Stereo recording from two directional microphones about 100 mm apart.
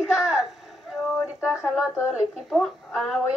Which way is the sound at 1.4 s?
10° right (ahead or behind).